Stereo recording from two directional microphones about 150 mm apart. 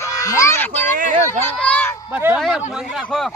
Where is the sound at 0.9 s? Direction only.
60° right (ahead or behind).